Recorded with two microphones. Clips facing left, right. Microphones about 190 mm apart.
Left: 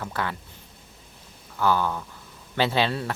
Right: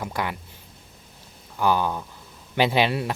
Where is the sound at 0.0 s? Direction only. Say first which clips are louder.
Right 2 dB; 15° right (ahead or behind).